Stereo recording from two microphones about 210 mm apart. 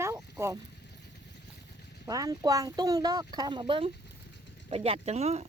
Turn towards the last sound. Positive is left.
turn(degrees=-30)  # may be behind; listen again after turning